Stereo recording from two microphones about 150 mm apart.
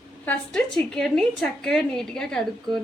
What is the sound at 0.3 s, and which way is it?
A woman's voice, 5° left (ahead or behind).